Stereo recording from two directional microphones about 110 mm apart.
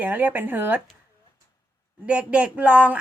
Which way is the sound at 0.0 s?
15° right (ahead or behind).